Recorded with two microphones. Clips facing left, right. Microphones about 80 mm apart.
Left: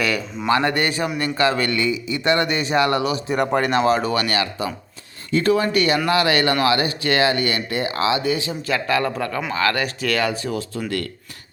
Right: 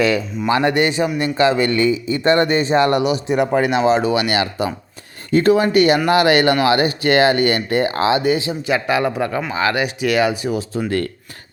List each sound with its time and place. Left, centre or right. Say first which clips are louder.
0.4 s a man's voice: right 3 dB; centre
3.3 s speech: right 2 dB; centre
4.4 s a man's voice: right 4 dB; right